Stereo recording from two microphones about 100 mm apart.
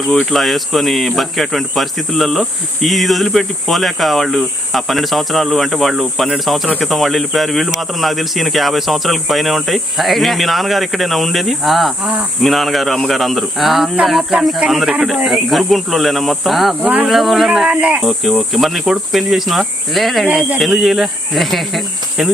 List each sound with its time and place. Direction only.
0.1 s speech: centre (ahead or behind)
16.8 s speech: 15° right (ahead or behind)
17.1 s speech: centre (ahead or behind)
20.2 s speech: 15° right (ahead or behind)
20.6 s speech: centre (ahead or behind)